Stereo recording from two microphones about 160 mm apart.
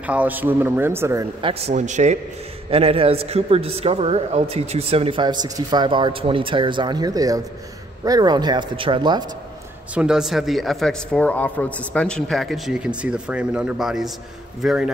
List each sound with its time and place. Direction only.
0.0 s a man's voice: 10° right (ahead or behind)
1.4 s speech: 40° right (ahead or behind)
2.7 s a man's voice: 35° right (ahead or behind)
9.9 s a man's voice: 5° right (ahead or behind)